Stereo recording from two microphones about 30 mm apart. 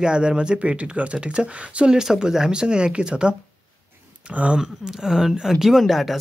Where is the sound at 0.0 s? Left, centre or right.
Right.